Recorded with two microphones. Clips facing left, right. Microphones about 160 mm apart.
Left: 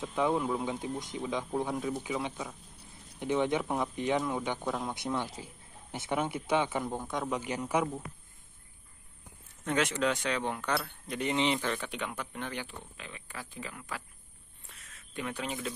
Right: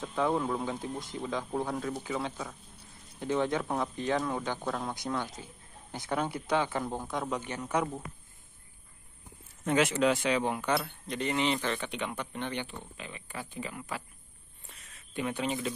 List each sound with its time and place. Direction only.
0.0 s speech: 10° left (ahead or behind)
0.8 s speech: 15° left (ahead or behind)
3.6 s speech: 5° left (ahead or behind)
5.3 s a sound: 30° left (ahead or behind)
6.1 s speech: 5° left (ahead or behind)
6.4 s speech: 20° left (ahead or behind)
6.9 s speech: 5° right (ahead or behind)
7.3 s speech: 10° left (ahead or behind)
9.7 s speech: 5° right (ahead or behind)
11.1 s speech: 20° left (ahead or behind)
11.6 s speech: 5° left (ahead or behind)
15.1 s speech: 5° right (ahead or behind)